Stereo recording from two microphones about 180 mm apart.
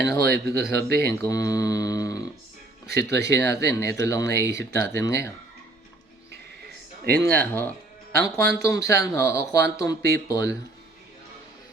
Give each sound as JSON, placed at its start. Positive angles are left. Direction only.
{"t": 0.2, "sound": "speech", "side_deg": -60}
{"t": 1.0, "sound": "speech", "side_deg": 20}
{"t": 7.2, "sound": "speech", "side_deg": 10}